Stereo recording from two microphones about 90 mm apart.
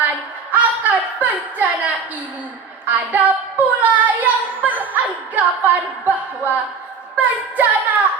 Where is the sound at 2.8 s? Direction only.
20° right (ahead or behind).